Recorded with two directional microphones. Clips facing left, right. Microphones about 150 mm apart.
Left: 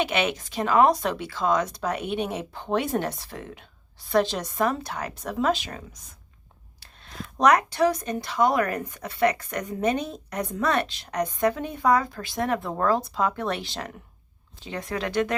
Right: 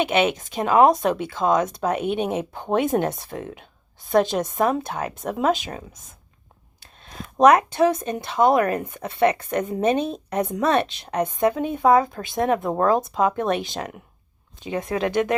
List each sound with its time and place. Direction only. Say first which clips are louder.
0.0 s a woman's voice: right 5 dB; 20° right (ahead or behind)
0.9 s speech: right 4 dB; 50° right (ahead or behind)
1.3 s a woman's voice: right 4 dB; 20° right (ahead or behind)
2.9 s speech: right 5 dB; 50° right (ahead or behind)
3.3 s a woman's voice: right 5 dB; 15° right (ahead or behind)